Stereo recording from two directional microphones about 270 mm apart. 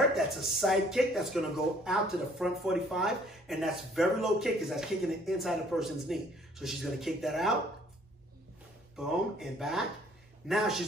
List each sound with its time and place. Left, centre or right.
0.1 s speech: centre
8.9 s speech: centre